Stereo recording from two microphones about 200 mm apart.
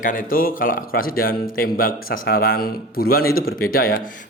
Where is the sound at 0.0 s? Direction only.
45° left (ahead or behind).